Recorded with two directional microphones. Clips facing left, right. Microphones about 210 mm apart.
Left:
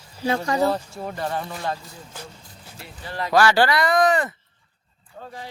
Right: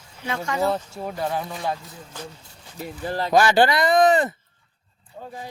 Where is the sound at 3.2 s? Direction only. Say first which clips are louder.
Right 1 dB; 20° right (ahead or behind).